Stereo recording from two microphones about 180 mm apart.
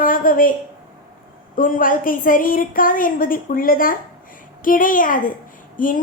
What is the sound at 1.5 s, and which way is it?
A woman's voice, 50° left (ahead or behind).